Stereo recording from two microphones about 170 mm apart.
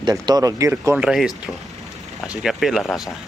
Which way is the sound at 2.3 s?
Centre (ahead or behind).